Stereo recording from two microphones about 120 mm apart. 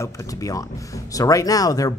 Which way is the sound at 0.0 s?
25° left (ahead or behind).